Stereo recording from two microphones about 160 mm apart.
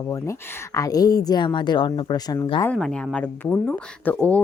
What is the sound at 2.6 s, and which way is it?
Speech, 5° left (ahead or behind).